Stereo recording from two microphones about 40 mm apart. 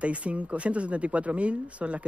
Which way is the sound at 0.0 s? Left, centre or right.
Right.